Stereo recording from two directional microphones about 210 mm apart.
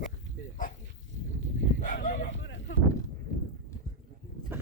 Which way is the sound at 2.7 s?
60° left (ahead or behind).